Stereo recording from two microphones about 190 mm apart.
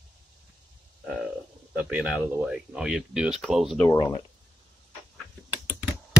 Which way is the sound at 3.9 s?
20° left (ahead or behind).